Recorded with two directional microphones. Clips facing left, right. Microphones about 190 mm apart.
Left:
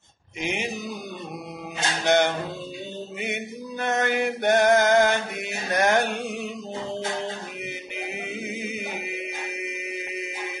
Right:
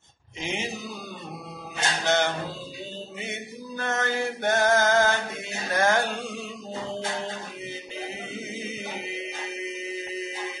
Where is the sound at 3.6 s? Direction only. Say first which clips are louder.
Left 3 dB; 20° left (ahead or behind).